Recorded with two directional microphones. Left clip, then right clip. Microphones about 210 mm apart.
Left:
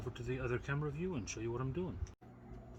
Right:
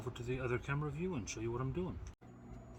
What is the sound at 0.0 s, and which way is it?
Speech, centre (ahead or behind).